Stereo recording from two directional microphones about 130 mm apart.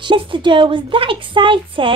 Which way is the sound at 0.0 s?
40° right (ahead or behind).